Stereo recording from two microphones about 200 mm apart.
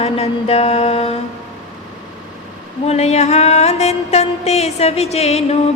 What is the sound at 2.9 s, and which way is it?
Speech, 30° left (ahead or behind).